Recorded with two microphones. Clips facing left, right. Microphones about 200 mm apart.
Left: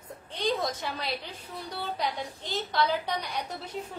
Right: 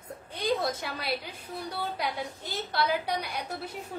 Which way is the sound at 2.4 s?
10° right (ahead or behind).